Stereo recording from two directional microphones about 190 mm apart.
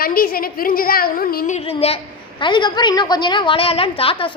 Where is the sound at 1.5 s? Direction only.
30° left (ahead or behind).